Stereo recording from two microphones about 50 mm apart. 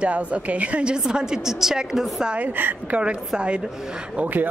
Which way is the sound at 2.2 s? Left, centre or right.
Right.